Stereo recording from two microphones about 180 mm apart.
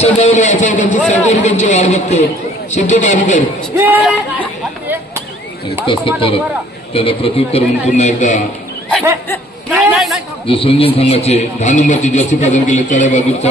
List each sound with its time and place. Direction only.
0.0 s a man's voice: 40° left (ahead or behind)
3.7 s speech: 10° right (ahead or behind)
5.9 s a man's voice: 30° left (ahead or behind)
9.7 s a sound: centre (ahead or behind)
10.4 s a man's voice: 30° left (ahead or behind)